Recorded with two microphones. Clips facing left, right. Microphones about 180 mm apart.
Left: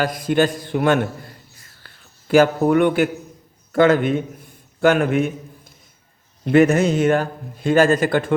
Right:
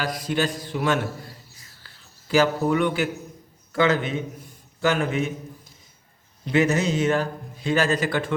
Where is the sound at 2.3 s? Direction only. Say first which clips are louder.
Left 6 dB; 55° left (ahead or behind).